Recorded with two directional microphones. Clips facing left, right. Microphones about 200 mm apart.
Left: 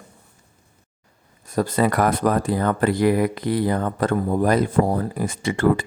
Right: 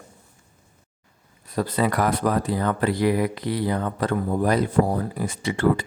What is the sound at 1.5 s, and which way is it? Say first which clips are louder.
Speech: left 3 dB; 45° left (ahead or behind).